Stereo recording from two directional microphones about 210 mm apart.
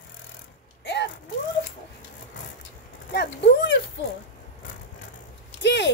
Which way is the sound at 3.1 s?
55° left (ahead or behind).